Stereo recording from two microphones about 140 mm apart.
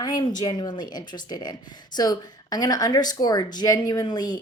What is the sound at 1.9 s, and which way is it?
Speech, 30° left (ahead or behind).